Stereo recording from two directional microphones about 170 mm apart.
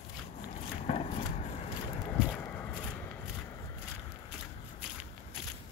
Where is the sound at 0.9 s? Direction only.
40° left (ahead or behind).